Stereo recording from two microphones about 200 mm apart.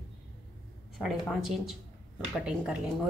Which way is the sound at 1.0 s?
Centre (ahead or behind).